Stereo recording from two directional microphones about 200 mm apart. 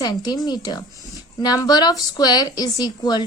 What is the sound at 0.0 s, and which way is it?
A woman's voice, 20° left (ahead or behind).